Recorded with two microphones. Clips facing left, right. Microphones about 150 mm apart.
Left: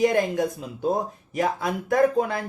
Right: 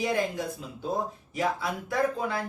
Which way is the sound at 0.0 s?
50° left (ahead or behind).